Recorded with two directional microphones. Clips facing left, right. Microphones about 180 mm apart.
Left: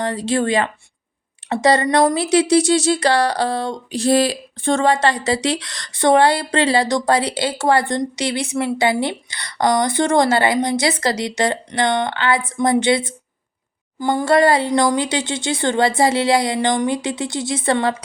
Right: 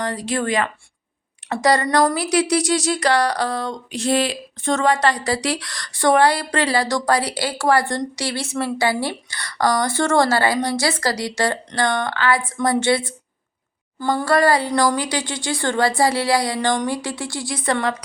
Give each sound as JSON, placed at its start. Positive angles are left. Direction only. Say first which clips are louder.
{"t": 0.0, "sound": "speech", "louder": "left 4 dB", "side_deg": 25}